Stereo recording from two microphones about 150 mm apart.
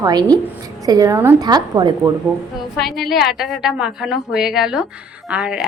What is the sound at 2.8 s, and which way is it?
A woman's voice, centre (ahead or behind).